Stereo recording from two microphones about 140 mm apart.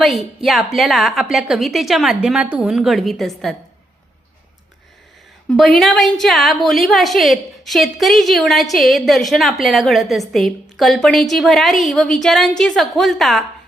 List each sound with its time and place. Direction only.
0.0 s a woman's voice: centre (ahead or behind)
5.5 s a woman's voice: 5° left (ahead or behind)